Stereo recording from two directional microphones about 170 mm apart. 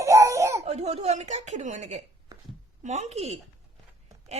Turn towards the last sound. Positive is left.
turn(degrees=-40)  # may be behind; listen again after turning